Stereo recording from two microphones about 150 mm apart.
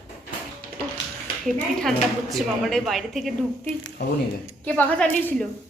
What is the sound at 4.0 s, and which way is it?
Speech, 90° left.